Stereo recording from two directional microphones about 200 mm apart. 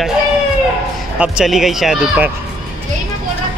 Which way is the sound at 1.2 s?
5° right (ahead or behind).